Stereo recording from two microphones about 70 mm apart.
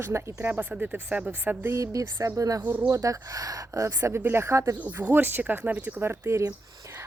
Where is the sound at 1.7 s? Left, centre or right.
Right.